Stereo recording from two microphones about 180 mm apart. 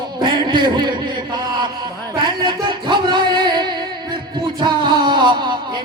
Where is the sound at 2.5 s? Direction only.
25° right (ahead or behind).